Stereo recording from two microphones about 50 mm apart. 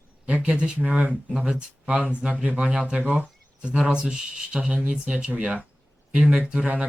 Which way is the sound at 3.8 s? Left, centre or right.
Centre.